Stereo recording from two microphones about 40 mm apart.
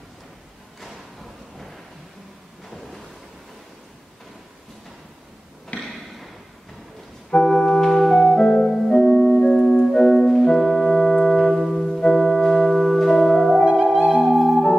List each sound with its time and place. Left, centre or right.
5.7 s a sound: left
7.2 s organ: left
7.8 s organ: centre
8.2 s music: left
8.6 s music: centre
8.9 s music: centre
9.9 s organ: centre
14.1 s music: centre